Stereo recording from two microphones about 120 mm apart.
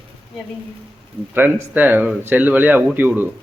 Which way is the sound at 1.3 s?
20° right (ahead or behind).